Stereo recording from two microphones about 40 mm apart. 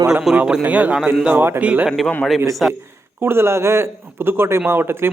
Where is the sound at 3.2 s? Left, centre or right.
Right.